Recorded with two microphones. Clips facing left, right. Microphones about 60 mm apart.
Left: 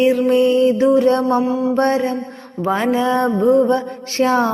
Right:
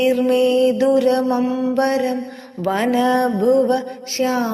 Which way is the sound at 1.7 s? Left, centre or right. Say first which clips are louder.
Left 1 dB; left.